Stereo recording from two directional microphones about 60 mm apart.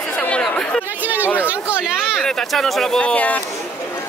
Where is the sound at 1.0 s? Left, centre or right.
Right.